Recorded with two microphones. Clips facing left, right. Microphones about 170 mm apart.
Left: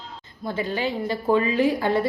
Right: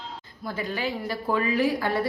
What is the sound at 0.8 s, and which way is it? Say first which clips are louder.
A woman's voice: left 4 dB; 25° left (ahead or behind).